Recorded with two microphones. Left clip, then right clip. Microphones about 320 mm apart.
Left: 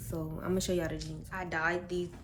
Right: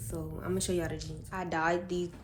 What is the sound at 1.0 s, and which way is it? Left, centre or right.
A woman's voice, centre.